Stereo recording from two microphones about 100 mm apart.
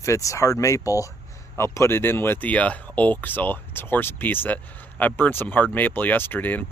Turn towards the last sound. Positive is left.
turn(degrees=15)  # may be behind; listen again after turning